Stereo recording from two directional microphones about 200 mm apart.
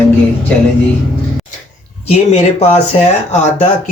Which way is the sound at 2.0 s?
30° left (ahead or behind).